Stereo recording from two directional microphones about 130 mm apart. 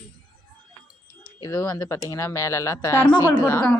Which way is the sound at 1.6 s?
30° left (ahead or behind).